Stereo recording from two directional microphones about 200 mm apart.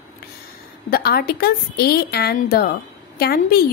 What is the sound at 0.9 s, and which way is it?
A woman's voice, 50° left (ahead or behind).